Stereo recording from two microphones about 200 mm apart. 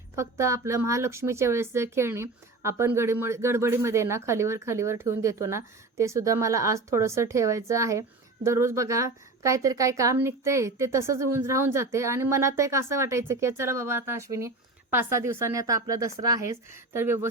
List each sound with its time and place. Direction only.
0.2 s speech: 15° right (ahead or behind)